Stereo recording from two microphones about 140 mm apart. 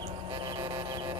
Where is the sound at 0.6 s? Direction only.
35° right (ahead or behind).